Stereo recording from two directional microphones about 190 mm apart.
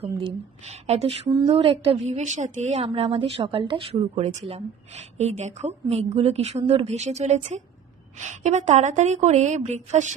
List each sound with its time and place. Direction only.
0.7 s a woman's voice: 35° right (ahead or behind)
3.9 s a woman's voice: 35° right (ahead or behind)